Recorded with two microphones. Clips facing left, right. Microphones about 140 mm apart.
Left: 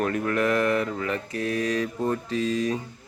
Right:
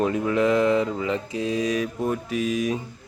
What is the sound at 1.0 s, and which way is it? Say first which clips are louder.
Speech: right 2 dB; 15° right (ahead or behind).